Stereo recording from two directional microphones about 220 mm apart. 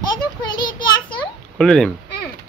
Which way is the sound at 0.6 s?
20° left (ahead or behind).